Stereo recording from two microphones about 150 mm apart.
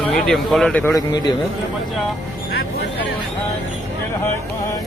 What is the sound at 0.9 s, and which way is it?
Speech, 25° left (ahead or behind).